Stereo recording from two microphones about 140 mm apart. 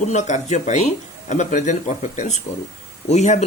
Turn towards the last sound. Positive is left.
turn(degrees=55)  # may be behind; listen again after turning